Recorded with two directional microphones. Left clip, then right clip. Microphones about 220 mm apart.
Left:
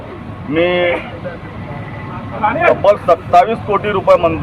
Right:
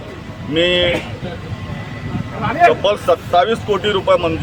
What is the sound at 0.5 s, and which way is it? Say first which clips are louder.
Speech: left 1 dB; 20° right (ahead or behind).